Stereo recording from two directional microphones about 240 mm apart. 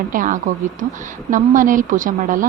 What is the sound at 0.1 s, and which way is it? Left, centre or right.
A woman's voice, right.